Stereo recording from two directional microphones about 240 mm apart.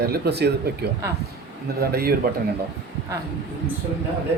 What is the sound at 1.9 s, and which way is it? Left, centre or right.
Speech, right.